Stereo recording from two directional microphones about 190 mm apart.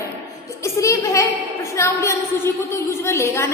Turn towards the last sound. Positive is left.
turn(degrees=15)  # may be behind; listen again after turning